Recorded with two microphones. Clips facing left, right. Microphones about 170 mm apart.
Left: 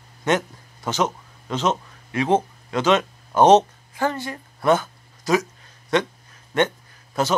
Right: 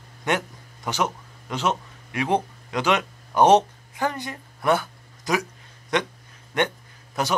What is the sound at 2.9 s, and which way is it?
Speech, 20° left (ahead or behind).